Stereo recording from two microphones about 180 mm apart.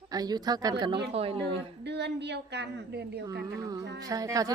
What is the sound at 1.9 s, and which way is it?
A woman's voice, 70° right (ahead or behind).